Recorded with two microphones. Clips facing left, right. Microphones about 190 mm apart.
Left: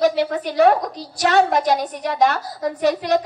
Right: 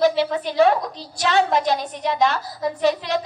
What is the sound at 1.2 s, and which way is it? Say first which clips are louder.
Speech: left 3 dB; 40° left (ahead or behind).